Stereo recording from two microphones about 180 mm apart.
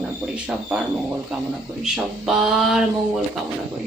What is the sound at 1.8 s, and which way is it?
Speech, centre (ahead or behind).